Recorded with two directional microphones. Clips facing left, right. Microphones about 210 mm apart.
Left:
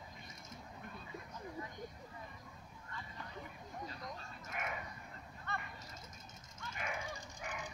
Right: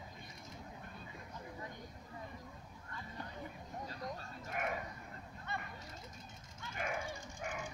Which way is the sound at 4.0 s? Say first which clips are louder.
Right 4 dB; 40° right (ahead or behind).